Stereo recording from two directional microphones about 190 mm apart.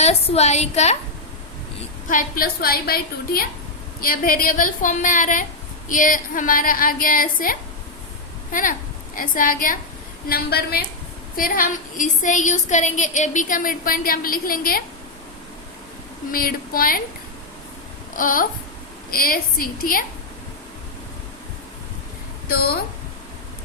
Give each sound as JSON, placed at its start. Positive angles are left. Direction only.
{"t": 0.0, "sound": "a woman's voice", "side_deg": 35}
{"t": 2.0, "sound": "a woman's voice", "side_deg": 45}
{"t": 9.1, "sound": "a woman's voice", "side_deg": 45}
{"t": 16.3, "sound": "a woman's voice", "side_deg": 50}
{"t": 18.1, "sound": "a sound", "side_deg": 45}
{"t": 19.1, "sound": "a woman's voice", "side_deg": 50}
{"t": 22.4, "sound": "a woman's voice", "side_deg": 55}